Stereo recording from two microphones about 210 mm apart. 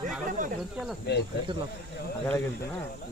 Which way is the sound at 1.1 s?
55° left (ahead or behind).